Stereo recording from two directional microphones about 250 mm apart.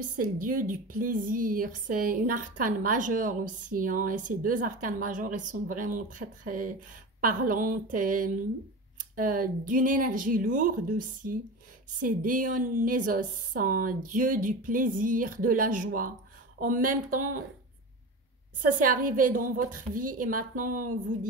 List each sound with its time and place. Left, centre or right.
0.2 s a woman's voice: right
18.8 s a woman's voice: right